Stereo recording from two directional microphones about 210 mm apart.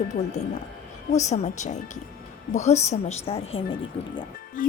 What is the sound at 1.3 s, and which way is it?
Speech, 35° left (ahead or behind).